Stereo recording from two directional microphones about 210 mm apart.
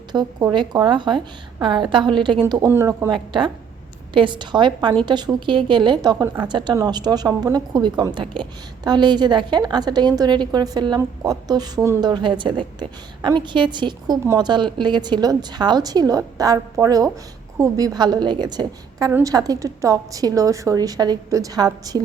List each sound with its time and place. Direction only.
0.1 s a woman's voice: 20° right (ahead or behind)